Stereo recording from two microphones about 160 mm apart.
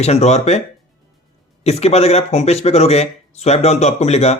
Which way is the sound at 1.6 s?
40° left (ahead or behind).